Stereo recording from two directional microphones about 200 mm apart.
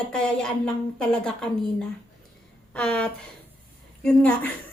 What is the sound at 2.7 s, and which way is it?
A woman's voice, 5° left (ahead or behind).